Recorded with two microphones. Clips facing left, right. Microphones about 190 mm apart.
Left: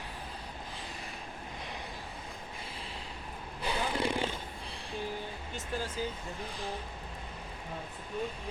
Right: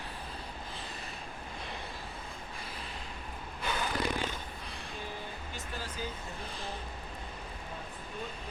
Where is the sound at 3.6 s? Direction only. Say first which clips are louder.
Left 2 dB; 30° left (ahead or behind).